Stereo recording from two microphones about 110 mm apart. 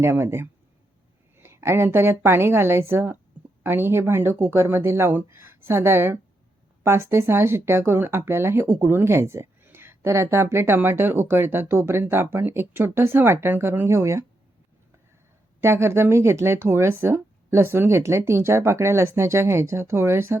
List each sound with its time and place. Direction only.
0.0 s speech: 25° right (ahead or behind)
15.6 s speech: 25° right (ahead or behind)